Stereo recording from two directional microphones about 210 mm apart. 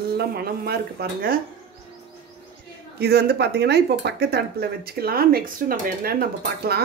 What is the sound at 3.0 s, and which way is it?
Speech, 50° right (ahead or behind).